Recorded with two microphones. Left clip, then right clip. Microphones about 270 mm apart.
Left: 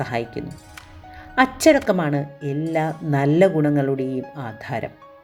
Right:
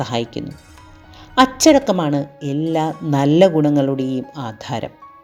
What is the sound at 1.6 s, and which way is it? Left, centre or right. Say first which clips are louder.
A woman's voice: right 3 dB; centre.